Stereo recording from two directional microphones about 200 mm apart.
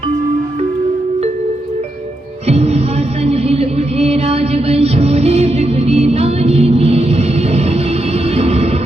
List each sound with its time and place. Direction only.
2.5 s music: 30° right (ahead or behind)